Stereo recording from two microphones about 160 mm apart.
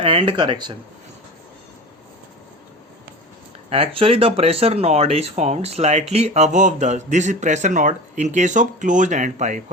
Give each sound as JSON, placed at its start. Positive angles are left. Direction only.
{"t": 0.0, "sound": "speech", "side_deg": -35}
{"t": 3.7, "sound": "speech", "side_deg": -35}